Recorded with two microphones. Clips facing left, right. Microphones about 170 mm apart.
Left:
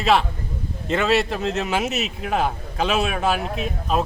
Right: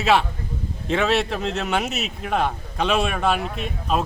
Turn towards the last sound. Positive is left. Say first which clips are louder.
# left 1 dB
turn(degrees=0)  # may be behind; listen again after turning